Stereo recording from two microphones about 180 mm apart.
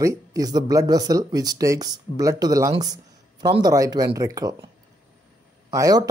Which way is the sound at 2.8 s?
20° right (ahead or behind).